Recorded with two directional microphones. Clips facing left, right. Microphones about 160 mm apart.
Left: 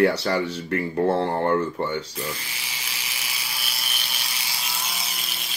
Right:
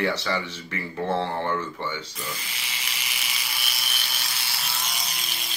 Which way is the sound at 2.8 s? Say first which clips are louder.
Even; 10° left (ahead or behind).